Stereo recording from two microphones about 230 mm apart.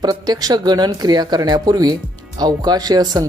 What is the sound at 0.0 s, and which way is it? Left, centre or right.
Speech, centre.